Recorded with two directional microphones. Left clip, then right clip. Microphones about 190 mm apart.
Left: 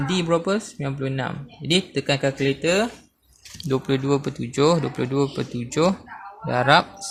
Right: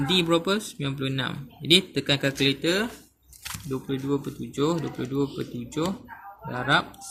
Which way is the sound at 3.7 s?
50° left (ahead or behind).